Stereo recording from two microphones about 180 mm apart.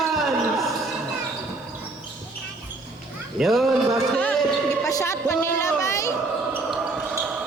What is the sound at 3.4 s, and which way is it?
Speech, centre (ahead or behind).